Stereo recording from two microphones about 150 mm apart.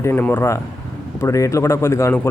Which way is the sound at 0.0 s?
15° left (ahead or behind).